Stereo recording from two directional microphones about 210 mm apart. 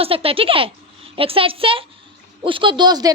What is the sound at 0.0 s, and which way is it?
A woman's voice, 25° right (ahead or behind).